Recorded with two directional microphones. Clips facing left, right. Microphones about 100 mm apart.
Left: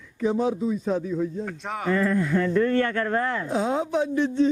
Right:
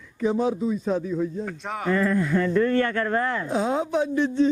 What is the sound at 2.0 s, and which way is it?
A man's voice, 20° right (ahead or behind).